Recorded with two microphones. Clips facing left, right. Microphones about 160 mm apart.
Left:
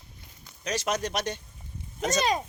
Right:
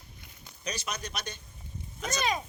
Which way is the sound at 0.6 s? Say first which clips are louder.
Left 8 dB; 90° left.